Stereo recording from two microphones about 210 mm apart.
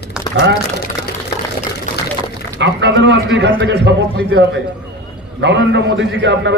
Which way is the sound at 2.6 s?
55° right (ahead or behind).